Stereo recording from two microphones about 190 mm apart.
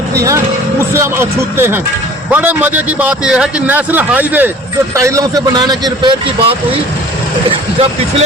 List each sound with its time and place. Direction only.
0.1 s a man's voice: 15° right (ahead or behind)